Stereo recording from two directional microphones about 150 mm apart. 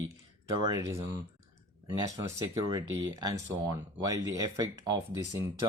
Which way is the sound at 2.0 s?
20° right (ahead or behind).